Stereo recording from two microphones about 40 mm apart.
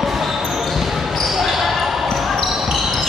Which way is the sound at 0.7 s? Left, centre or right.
Centre.